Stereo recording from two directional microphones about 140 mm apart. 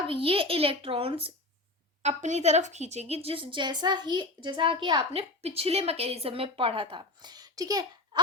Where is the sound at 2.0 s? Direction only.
55° right (ahead or behind); by 5.1 s 35° right (ahead or behind).